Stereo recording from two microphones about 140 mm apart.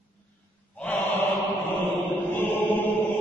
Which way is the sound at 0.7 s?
15° left (ahead or behind).